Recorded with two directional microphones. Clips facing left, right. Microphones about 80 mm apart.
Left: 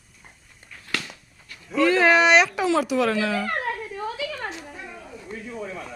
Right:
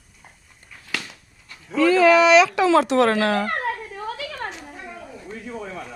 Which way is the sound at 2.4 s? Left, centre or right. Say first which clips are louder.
Right 5 dB; right.